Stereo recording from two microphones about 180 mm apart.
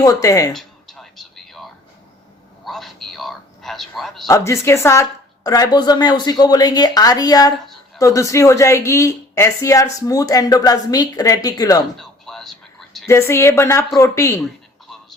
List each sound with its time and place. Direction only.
0.0 s speech: 20° left (ahead or behind)
0.5 s music: centre (ahead or behind)
2.6 s a sound: centre (ahead or behind)
4.3 s speech: 15° left (ahead or behind)
11.9 s a sound: centre (ahead or behind)
13.1 s a woman's voice: 15° left (ahead or behind)